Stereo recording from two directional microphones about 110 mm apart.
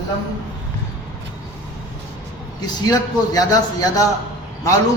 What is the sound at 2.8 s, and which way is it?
A man's voice, 35° left (ahead or behind).